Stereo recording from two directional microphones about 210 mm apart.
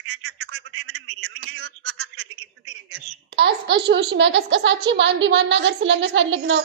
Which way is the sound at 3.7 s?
55° right (ahead or behind).